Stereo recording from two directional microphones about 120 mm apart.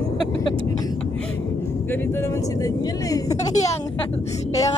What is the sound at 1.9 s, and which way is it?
Speech, 20° left (ahead or behind).